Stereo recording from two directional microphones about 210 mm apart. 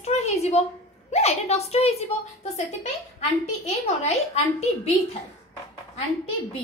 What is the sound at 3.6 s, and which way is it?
A woman's voice, 30° left (ahead or behind).